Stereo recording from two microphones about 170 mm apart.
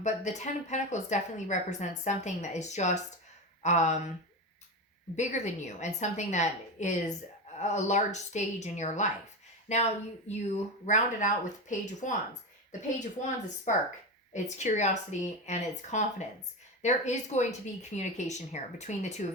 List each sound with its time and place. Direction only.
0.0 s speech: 45° left (ahead or behind)
5.1 s speech: 45° left (ahead or behind)